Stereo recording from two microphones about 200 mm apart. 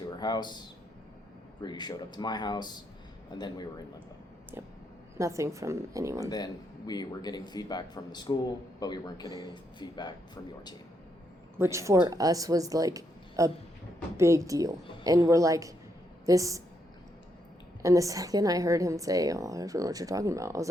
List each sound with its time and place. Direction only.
0.2 s speech: 20° left (ahead or behind)
1.6 s speech: 20° left (ahead or behind)
4.5 s a woman's voice: 10° right (ahead or behind)
6.2 s speech: 20° left (ahead or behind)
11.5 s a woman's voice: 15° right (ahead or behind)
17.8 s a woman's voice: 15° right (ahead or behind)